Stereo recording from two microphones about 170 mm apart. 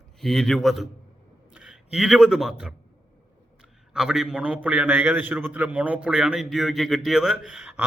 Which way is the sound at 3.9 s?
5° right (ahead or behind).